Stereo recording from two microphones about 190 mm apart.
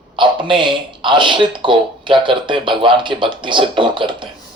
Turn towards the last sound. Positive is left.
turn(degrees=-25)  # may be behind; listen again after turning